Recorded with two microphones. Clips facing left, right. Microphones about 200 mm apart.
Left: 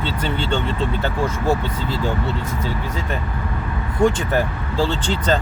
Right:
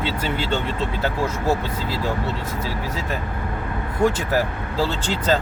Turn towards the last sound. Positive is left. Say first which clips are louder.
# left 1 dB
turn(degrees=-5)  # may be behind; listen again after turning